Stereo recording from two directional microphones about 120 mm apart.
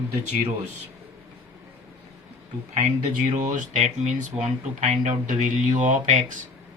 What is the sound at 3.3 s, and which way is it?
Speech, 90° right.